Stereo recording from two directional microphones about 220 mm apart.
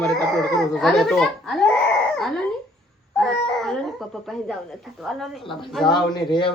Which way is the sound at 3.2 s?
Centre (ahead or behind).